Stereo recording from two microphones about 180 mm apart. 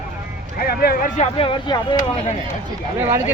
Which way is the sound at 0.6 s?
55° left (ahead or behind).